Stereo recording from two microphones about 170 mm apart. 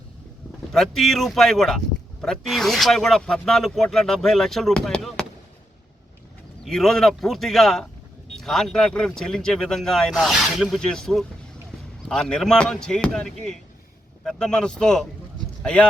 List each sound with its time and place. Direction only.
0.7 s speech: centre (ahead or behind)
6.7 s speech: 5° left (ahead or behind)